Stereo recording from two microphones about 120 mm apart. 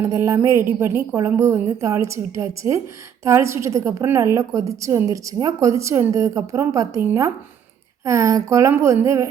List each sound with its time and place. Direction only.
0.0 s a woman's voice: 25° right (ahead or behind)